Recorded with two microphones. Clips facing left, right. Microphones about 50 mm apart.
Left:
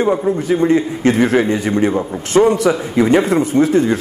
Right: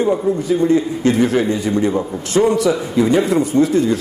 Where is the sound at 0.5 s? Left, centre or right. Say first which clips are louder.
Left 1 dB; left.